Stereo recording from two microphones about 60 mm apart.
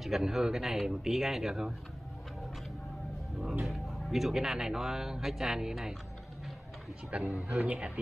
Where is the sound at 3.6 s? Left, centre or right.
Centre.